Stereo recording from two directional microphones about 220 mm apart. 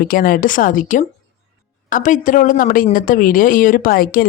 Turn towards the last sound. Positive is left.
turn(degrees=40)  # may be behind; listen again after turning